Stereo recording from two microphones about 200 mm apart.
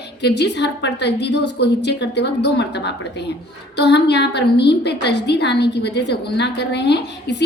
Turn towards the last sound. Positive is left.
turn(degrees=55)  # may be behind; listen again after turning